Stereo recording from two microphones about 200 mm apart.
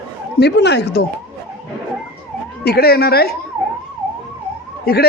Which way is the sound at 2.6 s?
50° left (ahead or behind).